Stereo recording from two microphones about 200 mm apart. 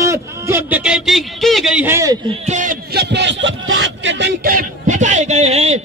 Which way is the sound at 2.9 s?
55° right (ahead or behind).